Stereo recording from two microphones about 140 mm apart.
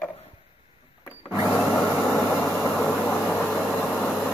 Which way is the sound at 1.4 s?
5° left (ahead or behind).